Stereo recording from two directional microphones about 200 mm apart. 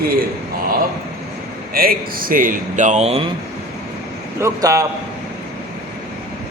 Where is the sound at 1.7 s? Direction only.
45° right (ahead or behind).